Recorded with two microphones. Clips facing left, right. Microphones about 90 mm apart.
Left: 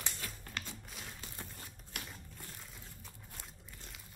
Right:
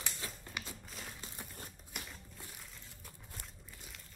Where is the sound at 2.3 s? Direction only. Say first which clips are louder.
Left 1 dB; 10° right (ahead or behind).